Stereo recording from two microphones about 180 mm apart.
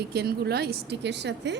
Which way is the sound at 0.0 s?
65° right (ahead or behind).